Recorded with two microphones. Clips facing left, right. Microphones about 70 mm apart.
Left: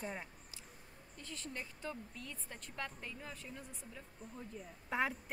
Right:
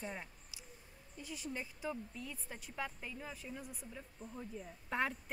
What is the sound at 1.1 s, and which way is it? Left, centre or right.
A woman's voice, centre.